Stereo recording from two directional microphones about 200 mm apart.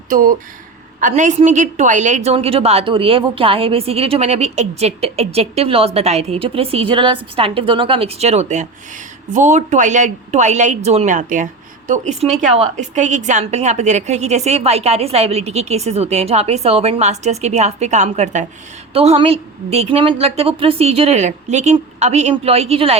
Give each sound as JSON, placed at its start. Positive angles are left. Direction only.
{"t": 0.1, "sound": "a woman's voice", "side_deg": -45}